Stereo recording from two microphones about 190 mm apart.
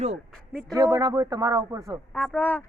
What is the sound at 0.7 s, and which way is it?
Speech, 20° right (ahead or behind).